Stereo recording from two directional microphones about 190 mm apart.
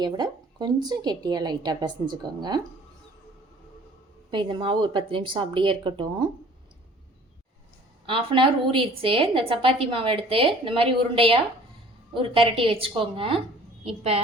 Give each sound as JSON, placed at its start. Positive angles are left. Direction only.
{"t": 0.0, "sound": "a woman's voice", "side_deg": -20}
{"t": 4.3, "sound": "a woman's voice", "side_deg": -25}
{"t": 8.0, "sound": "a woman's voice", "side_deg": -25}